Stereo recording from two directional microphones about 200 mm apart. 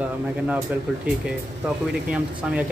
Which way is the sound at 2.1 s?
5° right (ahead or behind).